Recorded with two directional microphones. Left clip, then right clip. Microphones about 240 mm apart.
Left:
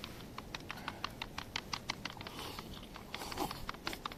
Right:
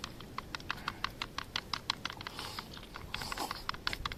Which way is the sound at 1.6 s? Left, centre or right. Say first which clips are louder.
Right 4 dB; right.